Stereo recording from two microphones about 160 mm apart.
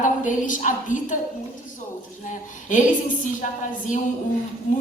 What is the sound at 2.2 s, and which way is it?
Speech, 50° left (ahead or behind).